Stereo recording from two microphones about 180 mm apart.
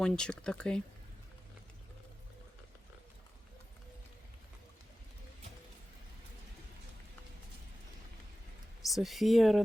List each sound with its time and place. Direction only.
0.0 s speech: 5° left (ahead or behind)
8.9 s speech: centre (ahead or behind)